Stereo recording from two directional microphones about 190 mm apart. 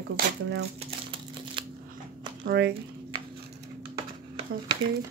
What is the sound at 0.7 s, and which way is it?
Crumpling, 30° right (ahead or behind).